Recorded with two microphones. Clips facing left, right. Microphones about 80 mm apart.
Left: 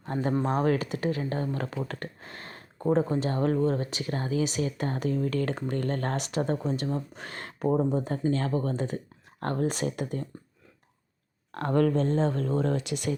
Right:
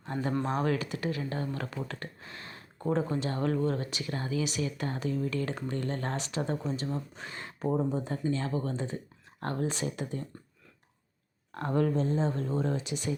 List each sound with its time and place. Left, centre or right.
0.0 s speech: left
7.8 s speech: left
11.5 s speech: left